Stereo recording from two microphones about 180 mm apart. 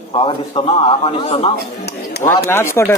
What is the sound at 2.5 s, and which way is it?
Speech, 15° left (ahead or behind).